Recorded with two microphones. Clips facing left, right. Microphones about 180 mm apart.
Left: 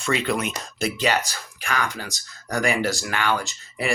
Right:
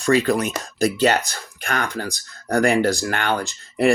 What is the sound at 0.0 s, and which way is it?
Speech, 35° right (ahead or behind).